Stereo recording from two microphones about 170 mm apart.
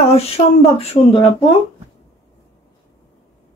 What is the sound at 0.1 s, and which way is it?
Speech, 35° left (ahead or behind).